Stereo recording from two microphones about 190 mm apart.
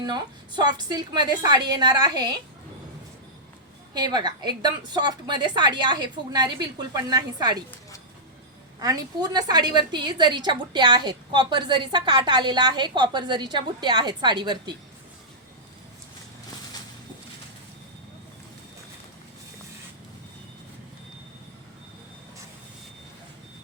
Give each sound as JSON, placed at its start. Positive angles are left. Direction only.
{"t": 0.0, "sound": "a woman's voice", "side_deg": -20}
{"t": 3.9, "sound": "a woman's voice", "side_deg": -20}
{"t": 8.8, "sound": "a woman's voice", "side_deg": -20}